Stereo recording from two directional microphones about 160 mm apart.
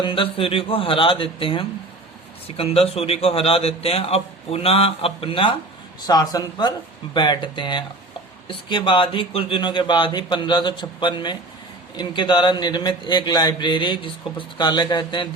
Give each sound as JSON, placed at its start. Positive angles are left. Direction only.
{"t": 0.0, "sound": "a man's voice", "side_deg": 35}